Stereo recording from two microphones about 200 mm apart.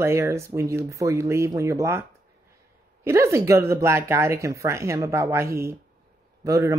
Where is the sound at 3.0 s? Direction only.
15° right (ahead or behind).